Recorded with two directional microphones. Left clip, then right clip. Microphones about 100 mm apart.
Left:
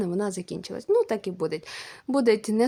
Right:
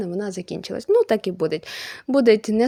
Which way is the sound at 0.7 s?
45° right (ahead or behind).